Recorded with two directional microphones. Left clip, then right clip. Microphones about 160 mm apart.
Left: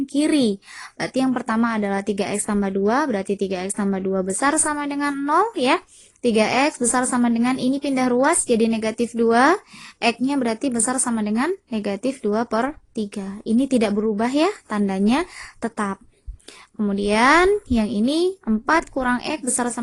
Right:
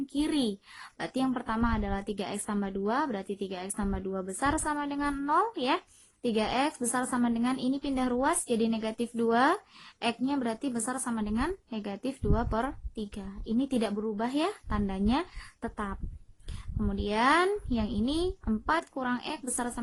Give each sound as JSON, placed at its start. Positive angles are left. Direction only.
{"t": 0.0, "sound": "a woman's voice", "side_deg": 25}